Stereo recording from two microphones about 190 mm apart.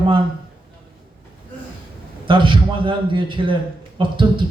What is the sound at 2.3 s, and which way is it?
A man's voice, 25° right (ahead or behind).